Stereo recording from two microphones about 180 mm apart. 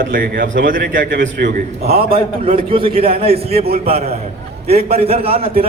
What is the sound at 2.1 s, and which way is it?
A man's voice, 30° right (ahead or behind).